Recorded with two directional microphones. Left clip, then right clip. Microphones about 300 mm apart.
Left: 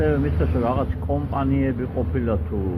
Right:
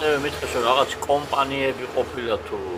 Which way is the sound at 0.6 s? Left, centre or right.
Centre.